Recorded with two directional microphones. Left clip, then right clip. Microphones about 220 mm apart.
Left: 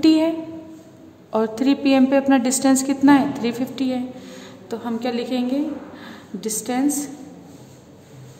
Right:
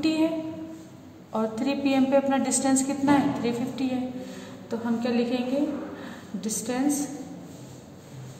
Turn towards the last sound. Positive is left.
turn(degrees=45)  # may be behind; listen again after turning